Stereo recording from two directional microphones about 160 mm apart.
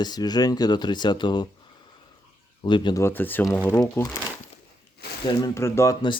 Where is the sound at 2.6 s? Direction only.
30° left (ahead or behind).